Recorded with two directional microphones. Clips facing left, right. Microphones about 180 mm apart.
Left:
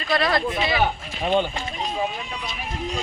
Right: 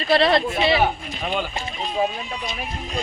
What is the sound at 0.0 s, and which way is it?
Speech, 30° right (ahead or behind).